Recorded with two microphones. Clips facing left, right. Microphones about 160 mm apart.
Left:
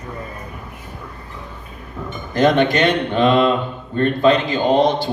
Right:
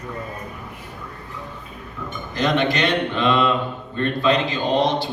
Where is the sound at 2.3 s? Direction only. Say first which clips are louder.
Left 6 dB; 50° left (ahead or behind).